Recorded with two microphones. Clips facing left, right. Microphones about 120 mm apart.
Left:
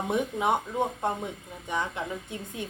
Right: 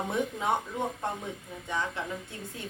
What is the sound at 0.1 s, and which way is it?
Speech, 20° left (ahead or behind).